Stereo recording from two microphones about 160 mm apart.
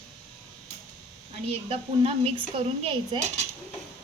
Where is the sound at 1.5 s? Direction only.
35° right (ahead or behind).